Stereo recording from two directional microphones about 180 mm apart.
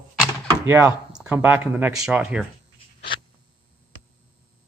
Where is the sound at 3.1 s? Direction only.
30° left (ahead or behind).